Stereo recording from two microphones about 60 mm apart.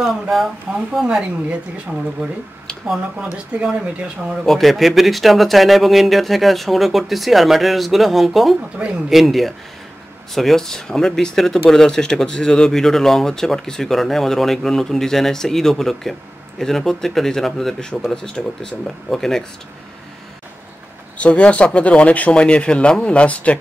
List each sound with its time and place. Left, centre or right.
0.0 s speech: centre
1.5 s speech: centre
3.5 s speech: right
4.5 s speech: centre
21.2 s speech: left